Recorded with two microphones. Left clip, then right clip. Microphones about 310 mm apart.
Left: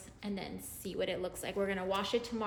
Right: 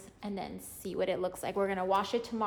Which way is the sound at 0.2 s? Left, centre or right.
Right.